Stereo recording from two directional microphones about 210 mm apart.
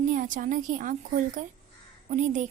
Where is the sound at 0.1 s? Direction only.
40° right (ahead or behind).